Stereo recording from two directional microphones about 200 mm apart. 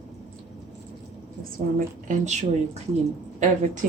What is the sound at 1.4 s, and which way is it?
A woman's voice, 40° right (ahead or behind).